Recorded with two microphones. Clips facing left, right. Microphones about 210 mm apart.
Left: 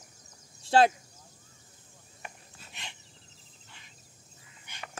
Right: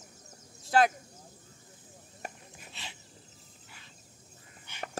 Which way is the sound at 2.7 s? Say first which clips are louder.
Even; 15° left (ahead or behind).